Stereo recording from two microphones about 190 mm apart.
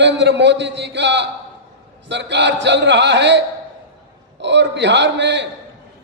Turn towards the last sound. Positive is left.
turn(degrees=-70)  # may be behind; listen again after turning